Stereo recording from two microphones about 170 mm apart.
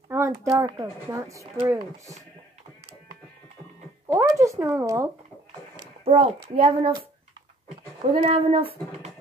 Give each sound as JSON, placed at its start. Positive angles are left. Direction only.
{"t": 0.1, "sound": "speech", "side_deg": -20}
{"t": 4.1, "sound": "speech", "side_deg": -15}
{"t": 5.8, "sound": "a child's voice", "side_deg": -35}
{"t": 8.1, "sound": "speech", "side_deg": -35}